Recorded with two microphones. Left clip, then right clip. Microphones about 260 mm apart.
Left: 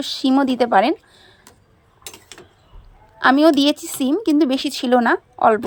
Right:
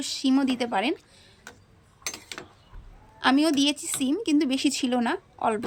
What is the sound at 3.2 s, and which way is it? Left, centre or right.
Speech, left.